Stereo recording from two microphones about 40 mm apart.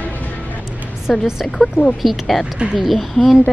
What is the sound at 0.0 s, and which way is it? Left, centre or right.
Music, left.